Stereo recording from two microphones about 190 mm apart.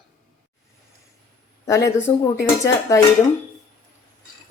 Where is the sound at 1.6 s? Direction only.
15° left (ahead or behind).